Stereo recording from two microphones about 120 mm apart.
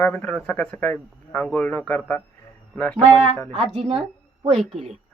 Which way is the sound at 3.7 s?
50° right (ahead or behind).